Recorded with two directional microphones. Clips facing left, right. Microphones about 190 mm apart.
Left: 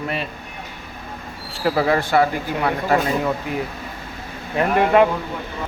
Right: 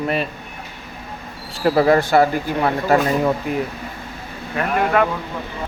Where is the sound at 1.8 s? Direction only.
40° right (ahead or behind).